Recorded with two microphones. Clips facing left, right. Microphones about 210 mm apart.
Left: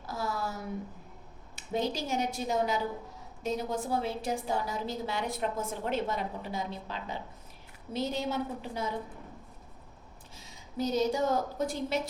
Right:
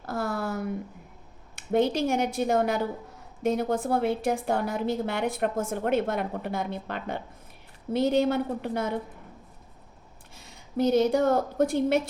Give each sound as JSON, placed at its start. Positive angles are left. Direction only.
{"t": 0.0, "sound": "a sound", "side_deg": -60}
{"t": 1.5, "sound": "a woman's voice", "side_deg": -60}
{"t": 10.3, "sound": "a woman's voice", "side_deg": -60}